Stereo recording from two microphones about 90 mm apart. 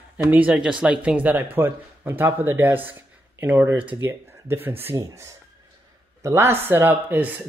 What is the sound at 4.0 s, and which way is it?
Speech, 25° right (ahead or behind).